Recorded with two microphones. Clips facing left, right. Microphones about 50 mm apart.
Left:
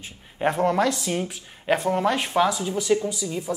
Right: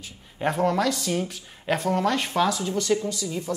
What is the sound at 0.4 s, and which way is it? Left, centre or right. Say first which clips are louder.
A woman's voice: left 2 dB; centre.